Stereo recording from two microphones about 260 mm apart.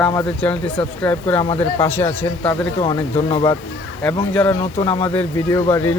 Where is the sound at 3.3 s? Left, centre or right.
Centre.